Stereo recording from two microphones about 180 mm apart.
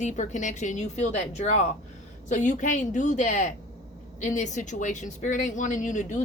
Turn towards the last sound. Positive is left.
turn(degrees=45)  # may be behind; listen again after turning